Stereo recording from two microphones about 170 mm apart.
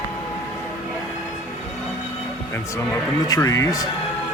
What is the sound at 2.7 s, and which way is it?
Speech, 20° left (ahead or behind).